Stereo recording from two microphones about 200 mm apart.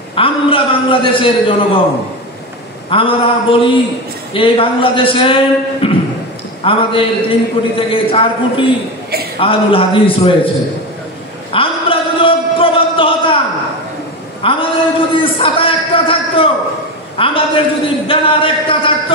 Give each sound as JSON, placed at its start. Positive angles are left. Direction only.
{"t": 0.1, "sound": "a man's voice", "side_deg": 25}
{"t": 2.9, "sound": "a man's voice", "side_deg": 25}
{"t": 11.5, "sound": "a sound", "side_deg": 25}
{"t": 14.4, "sound": "a man's voice", "side_deg": 25}